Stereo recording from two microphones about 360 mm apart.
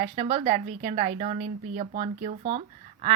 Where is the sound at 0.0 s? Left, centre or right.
Centre.